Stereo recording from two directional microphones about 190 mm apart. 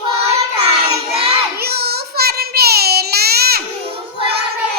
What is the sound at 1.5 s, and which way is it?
Child singing, 55° right (ahead or behind).